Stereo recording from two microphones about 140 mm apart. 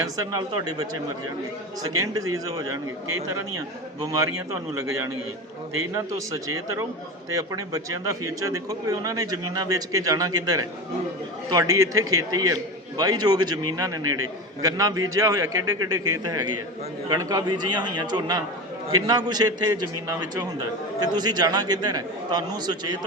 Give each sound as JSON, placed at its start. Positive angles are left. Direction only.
{"t": 0.0, "sound": "a man's voice", "side_deg": -25}
{"t": 4.0, "sound": "a man's voice", "side_deg": -20}
{"t": 5.9, "sound": "a man's voice", "side_deg": -20}